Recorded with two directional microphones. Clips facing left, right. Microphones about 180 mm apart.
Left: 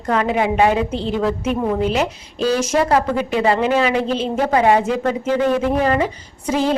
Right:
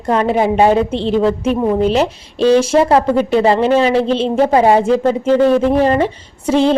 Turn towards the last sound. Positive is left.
turn(degrees=-25)  # may be behind; listen again after turning